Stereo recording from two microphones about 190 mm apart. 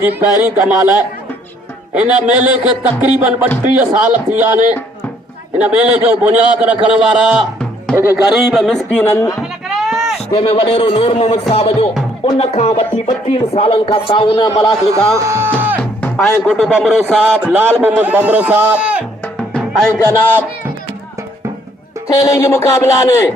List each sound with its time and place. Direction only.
0.2 s a man's voice: 10° right (ahead or behind)
5.5 s a man's voice: 5° right (ahead or behind); by 9.3 s 10° left (ahead or behind)
9.4 s a sound: centre (ahead or behind)
10.2 s a man's voice: 30° left (ahead or behind)
15.3 s music: 10° right (ahead or behind)
15.8 s music: 10° left (ahead or behind)
16.1 s a man's voice: centre (ahead or behind)
19.2 s music: 5° left (ahead or behind)
19.9 s speech: 10° left (ahead or behind)
22.0 s speech: 15° left (ahead or behind)